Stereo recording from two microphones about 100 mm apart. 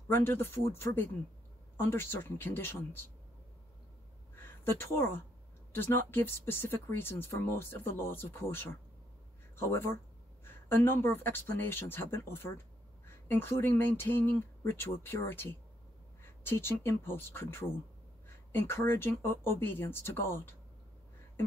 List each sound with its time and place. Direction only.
0.1 s speech: 25° left (ahead or behind)
1.8 s speech: 25° left (ahead or behind)
4.6 s speech: 25° left (ahead or behind)